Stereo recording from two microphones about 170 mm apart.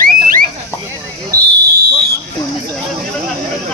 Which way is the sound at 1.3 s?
60° right (ahead or behind).